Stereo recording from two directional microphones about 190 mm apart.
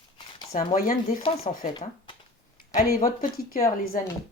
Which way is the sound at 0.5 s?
45° left (ahead or behind).